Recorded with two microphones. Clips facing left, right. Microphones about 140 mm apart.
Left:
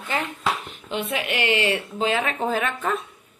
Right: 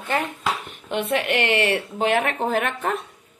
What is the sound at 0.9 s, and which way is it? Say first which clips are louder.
A woman's voice: right 4 dB; 60° right (ahead or behind).